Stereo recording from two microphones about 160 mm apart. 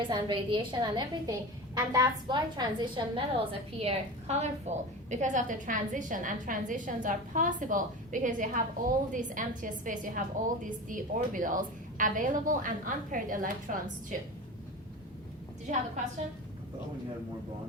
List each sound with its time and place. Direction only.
0.0 s a woman's voice: 30° right (ahead or behind); by 14.2 s 55° right (ahead or behind)